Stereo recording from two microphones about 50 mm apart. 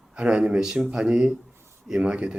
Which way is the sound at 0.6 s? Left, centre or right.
Centre.